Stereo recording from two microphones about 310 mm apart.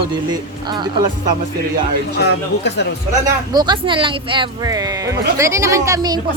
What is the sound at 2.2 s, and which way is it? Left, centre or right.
Speech, left.